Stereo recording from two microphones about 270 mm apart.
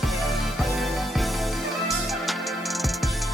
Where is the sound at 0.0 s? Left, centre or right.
Centre.